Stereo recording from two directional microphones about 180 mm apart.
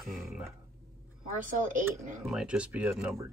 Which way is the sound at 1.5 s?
45° right (ahead or behind).